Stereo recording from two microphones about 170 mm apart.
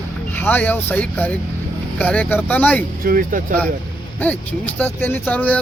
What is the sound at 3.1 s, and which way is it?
Speech, 55° right (ahead or behind).